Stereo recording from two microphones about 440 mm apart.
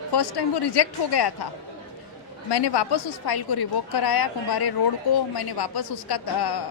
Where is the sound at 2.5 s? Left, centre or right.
Left.